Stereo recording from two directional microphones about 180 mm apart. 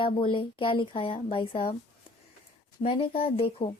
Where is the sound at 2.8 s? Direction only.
30° left (ahead or behind).